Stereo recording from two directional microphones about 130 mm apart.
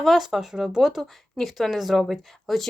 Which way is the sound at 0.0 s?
Centre (ahead or behind).